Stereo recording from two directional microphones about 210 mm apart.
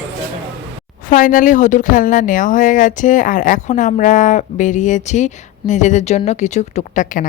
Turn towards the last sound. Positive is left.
turn(degrees=35)  # may be behind; listen again after turning